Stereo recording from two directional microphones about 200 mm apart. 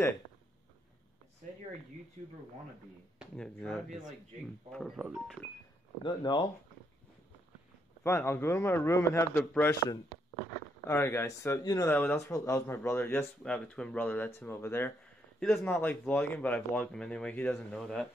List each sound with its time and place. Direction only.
3.2 s speech: 5° left (ahead or behind)
6.0 s speech: 25° left (ahead or behind)
8.0 s speech: 10° left (ahead or behind)
10.9 s speech: 10° left (ahead or behind)